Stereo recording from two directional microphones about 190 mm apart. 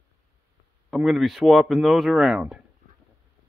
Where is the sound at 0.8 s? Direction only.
Centre (ahead or behind).